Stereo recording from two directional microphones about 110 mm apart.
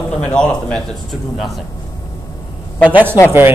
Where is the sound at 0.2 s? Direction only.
10° left (ahead or behind).